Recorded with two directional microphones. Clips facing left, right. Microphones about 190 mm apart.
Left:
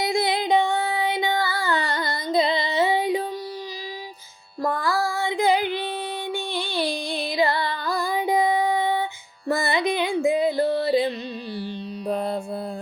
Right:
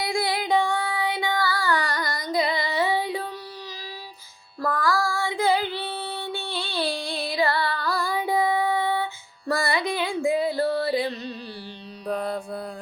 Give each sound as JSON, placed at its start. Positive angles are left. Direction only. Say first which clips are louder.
{"t": 0.0, "sound": "female singing", "louder": "left 3 dB", "side_deg": 20}
{"t": 4.6, "sound": "child singing", "louder": "left 1 dB", "side_deg": 20}
{"t": 9.5, "sound": "music", "louder": "left 2 dB", "side_deg": 20}
{"t": 12.0, "sound": "mantra", "louder": "left 2 dB", "side_deg": 25}